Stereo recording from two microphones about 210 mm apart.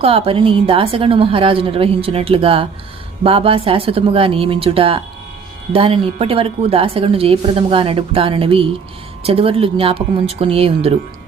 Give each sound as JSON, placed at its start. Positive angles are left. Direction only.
{"t": 0.0, "sound": "speech", "side_deg": -30}